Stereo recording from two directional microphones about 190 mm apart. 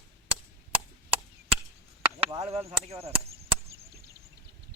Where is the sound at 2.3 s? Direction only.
35° right (ahead or behind).